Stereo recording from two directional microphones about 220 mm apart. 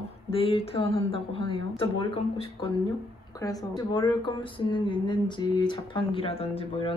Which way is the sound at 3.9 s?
20° left (ahead or behind).